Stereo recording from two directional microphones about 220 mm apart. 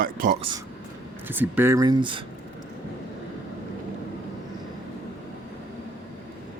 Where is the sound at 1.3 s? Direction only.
10° right (ahead or behind).